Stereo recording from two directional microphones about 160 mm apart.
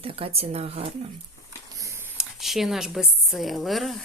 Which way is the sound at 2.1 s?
Centre (ahead or behind).